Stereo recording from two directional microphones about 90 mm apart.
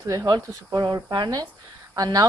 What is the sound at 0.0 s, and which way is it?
Speech, 35° right (ahead or behind).